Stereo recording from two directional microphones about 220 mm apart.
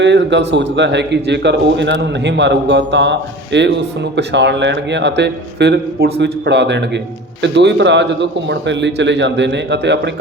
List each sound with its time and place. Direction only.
0.0 s a man's voice: 55° right (ahead or behind)